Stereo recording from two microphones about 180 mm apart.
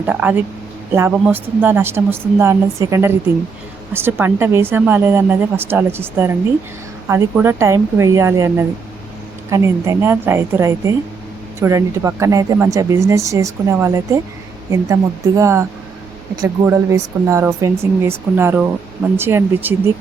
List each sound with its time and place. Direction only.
0.0 s speech: 10° right (ahead or behind)
15.4 s speech: 15° right (ahead or behind)